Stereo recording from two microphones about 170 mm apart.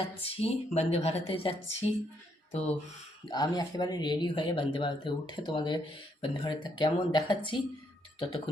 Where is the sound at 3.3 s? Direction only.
25° left (ahead or behind).